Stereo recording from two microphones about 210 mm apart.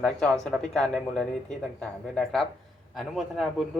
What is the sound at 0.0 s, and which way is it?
A man's voice, 5° left (ahead or behind).